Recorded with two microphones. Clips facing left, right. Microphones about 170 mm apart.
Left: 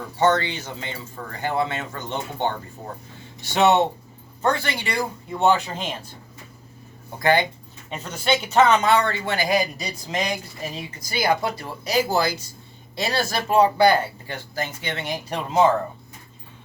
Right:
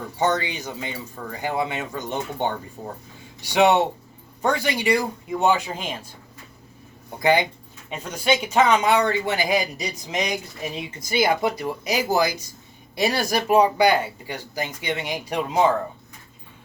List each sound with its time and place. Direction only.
0.2 s speech: 15° right (ahead or behind)
7.2 s speech: 15° right (ahead or behind)